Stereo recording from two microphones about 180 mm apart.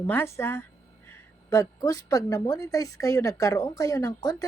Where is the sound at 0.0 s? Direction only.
15° left (ahead or behind).